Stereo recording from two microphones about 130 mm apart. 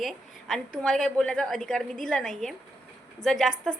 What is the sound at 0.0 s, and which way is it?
A woman's voice, centre (ahead or behind).